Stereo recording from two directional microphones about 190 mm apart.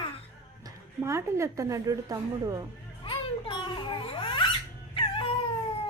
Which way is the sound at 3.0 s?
25° left (ahead or behind).